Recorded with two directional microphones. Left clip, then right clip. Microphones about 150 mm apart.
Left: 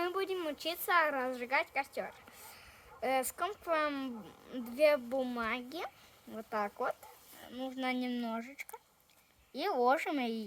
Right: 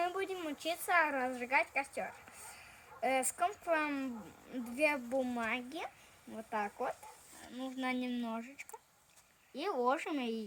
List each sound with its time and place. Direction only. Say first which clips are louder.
0.0 s a woman's voice: left 2 dB; 20° left (ahead or behind); by 10.4 s 50° left (ahead or behind)